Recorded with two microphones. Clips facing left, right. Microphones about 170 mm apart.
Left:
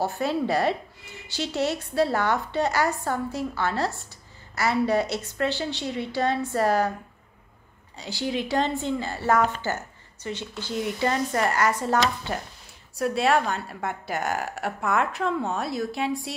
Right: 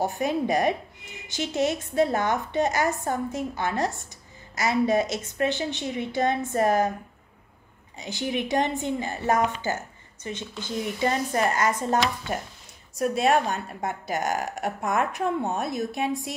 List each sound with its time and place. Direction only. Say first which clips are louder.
0.0 s speech: even; 15° right (ahead or behind)
8.0 s speech: even; 20° right (ahead or behind)